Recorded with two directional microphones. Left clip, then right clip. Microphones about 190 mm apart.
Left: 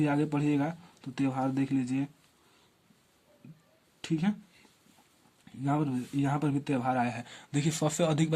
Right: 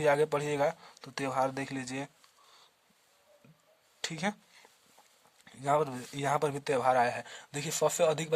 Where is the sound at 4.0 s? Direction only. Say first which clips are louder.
Left 1 dB; 50° right (ahead or behind).